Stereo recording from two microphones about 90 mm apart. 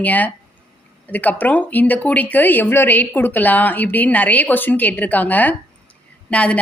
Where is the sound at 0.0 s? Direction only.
20° left (ahead or behind).